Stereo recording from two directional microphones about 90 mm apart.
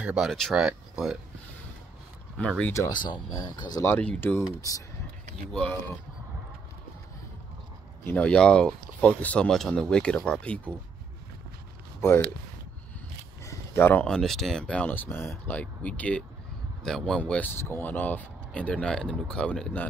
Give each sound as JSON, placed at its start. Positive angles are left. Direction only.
{"t": 0.0, "sound": "speech", "side_deg": -10}
{"t": 0.3, "sound": "speech", "side_deg": 5}
{"t": 0.6, "sound": "speech", "side_deg": -5}
{"t": 2.3, "sound": "speech", "side_deg": 10}
{"t": 2.9, "sound": "speech", "side_deg": 55}
{"t": 4.0, "sound": "speech", "side_deg": 20}
{"t": 4.6, "sound": "speech", "side_deg": 40}
{"t": 5.5, "sound": "speech", "side_deg": 10}
{"t": 8.0, "sound": "speech", "side_deg": 20}
{"t": 8.3, "sound": "speech", "side_deg": 10}
{"t": 12.0, "sound": "speech", "side_deg": 25}
{"t": 13.4, "sound": "a sound", "side_deg": 35}
{"t": 14.0, "sound": "speech", "side_deg": 5}